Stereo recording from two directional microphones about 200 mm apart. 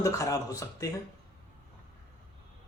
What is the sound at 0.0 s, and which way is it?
Speech, 15° left (ahead or behind).